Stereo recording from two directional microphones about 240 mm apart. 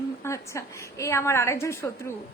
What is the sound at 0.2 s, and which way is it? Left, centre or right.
A woman's voice, centre.